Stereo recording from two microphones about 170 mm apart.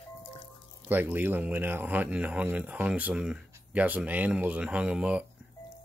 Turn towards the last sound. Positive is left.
turn(degrees=-5)  # may be behind; listen again after turning